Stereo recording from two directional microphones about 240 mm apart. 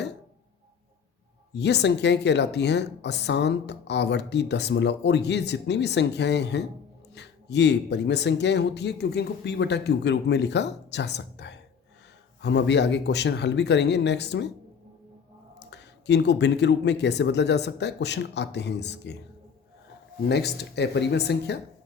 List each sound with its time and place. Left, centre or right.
1.5 s a woman's voice: left
15.5 s a woman's voice: left
20.2 s a woman's voice: left